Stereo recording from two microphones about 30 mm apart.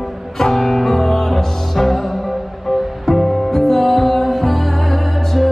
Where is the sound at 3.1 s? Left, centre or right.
Centre.